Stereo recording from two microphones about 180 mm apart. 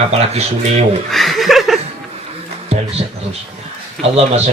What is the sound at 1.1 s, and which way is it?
Chuckle, centre (ahead or behind).